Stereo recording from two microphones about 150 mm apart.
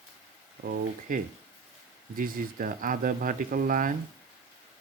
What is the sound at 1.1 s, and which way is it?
Speech, 65° right (ahead or behind).